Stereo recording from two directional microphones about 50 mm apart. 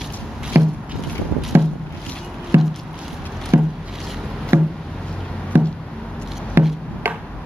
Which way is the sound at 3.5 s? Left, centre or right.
Right.